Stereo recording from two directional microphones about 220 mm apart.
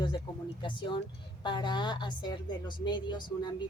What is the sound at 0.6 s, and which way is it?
A woman's voice, 20° left (ahead or behind).